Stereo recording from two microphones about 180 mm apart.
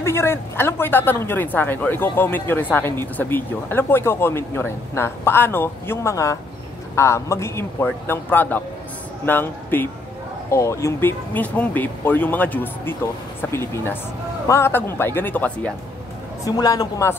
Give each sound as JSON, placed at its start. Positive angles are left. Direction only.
{"t": 0.0, "sound": "speech", "side_deg": 15}
{"t": 16.4, "sound": "a woman's voice", "side_deg": 20}